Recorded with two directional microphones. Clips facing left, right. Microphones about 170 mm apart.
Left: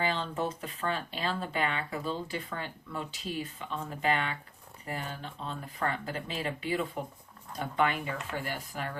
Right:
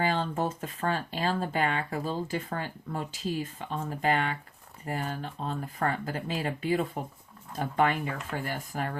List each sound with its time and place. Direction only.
0.0 s speech: 45° right (ahead or behind)